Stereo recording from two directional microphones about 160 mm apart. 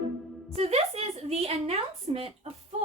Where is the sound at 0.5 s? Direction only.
40° right (ahead or behind).